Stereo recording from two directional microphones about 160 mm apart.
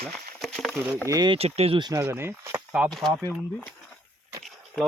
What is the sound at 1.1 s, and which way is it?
Speech, 25° right (ahead or behind).